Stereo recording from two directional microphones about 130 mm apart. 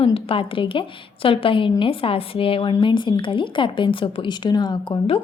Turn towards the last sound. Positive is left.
turn(degrees=35)  # may be behind; listen again after turning